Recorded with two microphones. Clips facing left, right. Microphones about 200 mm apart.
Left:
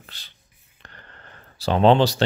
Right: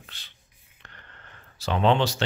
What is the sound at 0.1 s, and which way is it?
Speech, 35° left (ahead or behind).